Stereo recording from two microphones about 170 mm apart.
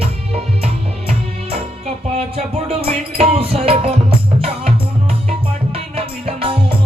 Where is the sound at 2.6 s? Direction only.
35° right (ahead or behind).